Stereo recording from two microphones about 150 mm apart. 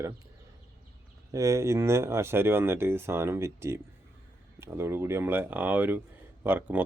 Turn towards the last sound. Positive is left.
turn(degrees=-10)  # may be behind; listen again after turning